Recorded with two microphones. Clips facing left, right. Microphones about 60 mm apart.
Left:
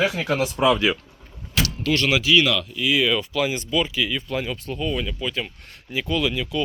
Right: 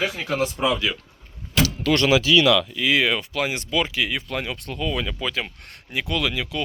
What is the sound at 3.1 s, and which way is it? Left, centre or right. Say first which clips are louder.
Speech: left 2 dB; right.